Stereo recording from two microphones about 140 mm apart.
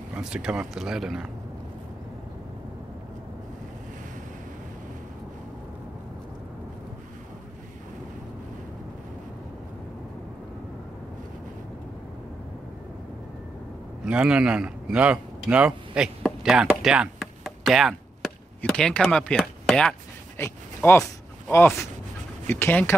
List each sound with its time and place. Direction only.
0.1 s speech: 5° right (ahead or behind)
14.0 s a man's voice: 5° right (ahead or behind)
16.2 s a sound: centre (ahead or behind)
18.6 s speech: 5° left (ahead or behind)
20.3 s a sound: 20° left (ahead or behind)
22.5 s speech: 15° left (ahead or behind)